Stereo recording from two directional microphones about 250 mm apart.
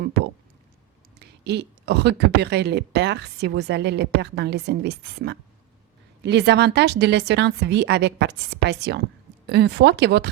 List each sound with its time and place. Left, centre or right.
1.2 s a woman's voice: right